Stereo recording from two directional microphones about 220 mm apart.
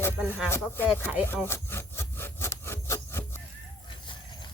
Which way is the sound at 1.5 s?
10° left (ahead or behind).